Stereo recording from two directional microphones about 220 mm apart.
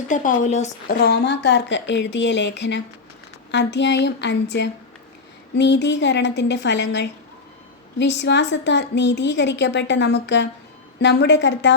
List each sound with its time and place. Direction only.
0.1 s speech: 35° left (ahead or behind); by 11.7 s 55° left (ahead or behind)